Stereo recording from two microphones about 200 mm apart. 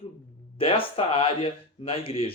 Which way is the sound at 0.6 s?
25° left (ahead or behind).